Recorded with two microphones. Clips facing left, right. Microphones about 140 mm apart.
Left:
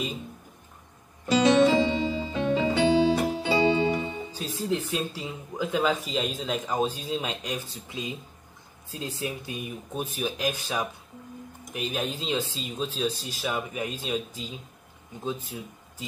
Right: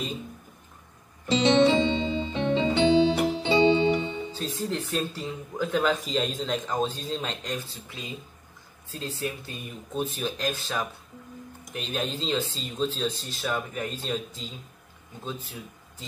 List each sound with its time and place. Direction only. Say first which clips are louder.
1.3 s music: left 1 dB; 25° right (ahead or behind)
4.3 s speech: left 1 dB; 10° left (ahead or behind)